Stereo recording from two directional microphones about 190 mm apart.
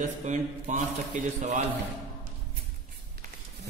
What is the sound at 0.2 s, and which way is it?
A man's voice, 40° right (ahead or behind).